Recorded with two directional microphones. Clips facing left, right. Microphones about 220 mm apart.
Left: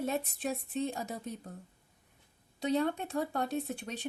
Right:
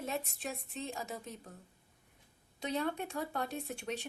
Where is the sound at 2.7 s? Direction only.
35° left (ahead or behind).